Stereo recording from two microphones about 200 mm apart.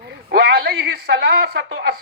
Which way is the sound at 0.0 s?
50° right (ahead or behind).